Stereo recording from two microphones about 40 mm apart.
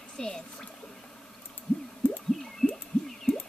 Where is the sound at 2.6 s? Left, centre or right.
Left.